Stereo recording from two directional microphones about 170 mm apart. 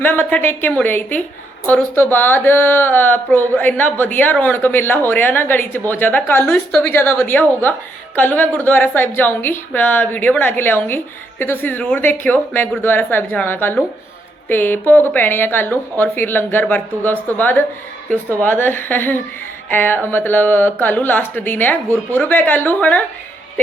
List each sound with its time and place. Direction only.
0.0 s speech: 10° left (ahead or behind)